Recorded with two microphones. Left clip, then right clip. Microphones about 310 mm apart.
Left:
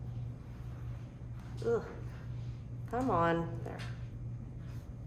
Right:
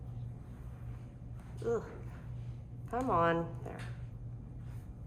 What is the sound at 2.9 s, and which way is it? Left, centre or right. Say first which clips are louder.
Speech: even; centre.